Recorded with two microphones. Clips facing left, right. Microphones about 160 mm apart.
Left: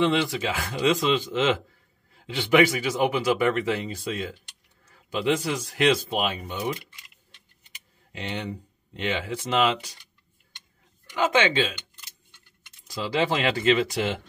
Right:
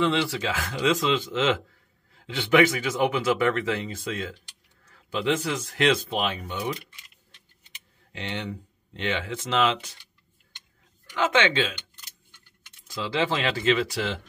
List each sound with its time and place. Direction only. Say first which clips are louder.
0.0 s speech: left 1 dB; 15° left (ahead or behind)
8.3 s speech: left 1 dB; 15° left (ahead or behind)
11.1 s speech: left 1 dB; 10° left (ahead or behind)
12.9 s speech: left 1 dB; 15° left (ahead or behind)